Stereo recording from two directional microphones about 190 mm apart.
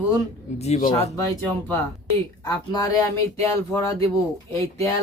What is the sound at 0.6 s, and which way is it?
Speech, 35° left (ahead or behind).